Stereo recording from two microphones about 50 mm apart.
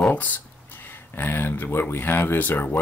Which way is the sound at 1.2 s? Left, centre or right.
Left.